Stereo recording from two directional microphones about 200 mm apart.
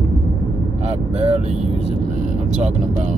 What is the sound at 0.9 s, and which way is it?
Speech, 30° right (ahead or behind).